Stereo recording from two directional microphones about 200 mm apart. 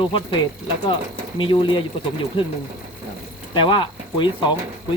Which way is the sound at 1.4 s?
25° left (ahead or behind).